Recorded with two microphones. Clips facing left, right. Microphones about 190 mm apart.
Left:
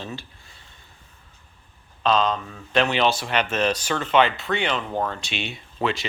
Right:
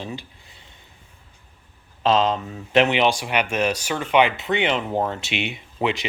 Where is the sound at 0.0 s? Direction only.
15° right (ahead or behind).